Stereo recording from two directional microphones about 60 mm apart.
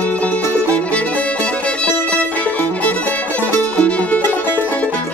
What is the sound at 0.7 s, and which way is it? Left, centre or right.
Music, left.